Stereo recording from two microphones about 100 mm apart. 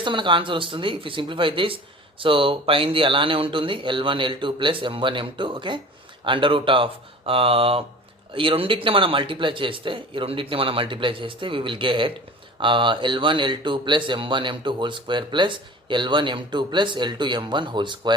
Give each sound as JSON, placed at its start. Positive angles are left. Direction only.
{"t": 0.0, "sound": "speech", "side_deg": -55}
{"t": 8.3, "sound": "speech", "side_deg": -60}